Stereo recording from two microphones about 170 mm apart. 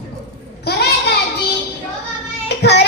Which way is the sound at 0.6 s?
70° left (ahead or behind).